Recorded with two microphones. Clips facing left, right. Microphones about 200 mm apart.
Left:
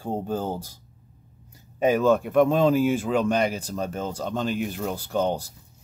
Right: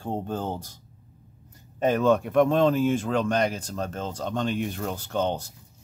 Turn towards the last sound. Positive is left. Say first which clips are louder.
# left 2 dB
turn(degrees=10)  # may be behind; listen again after turning